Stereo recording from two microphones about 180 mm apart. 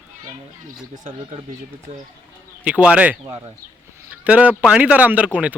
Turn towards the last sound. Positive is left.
turn(degrees=-10)  # may be behind; listen again after turning